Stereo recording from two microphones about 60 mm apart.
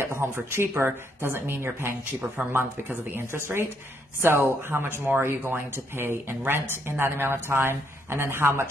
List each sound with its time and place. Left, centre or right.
0.0 s speech: right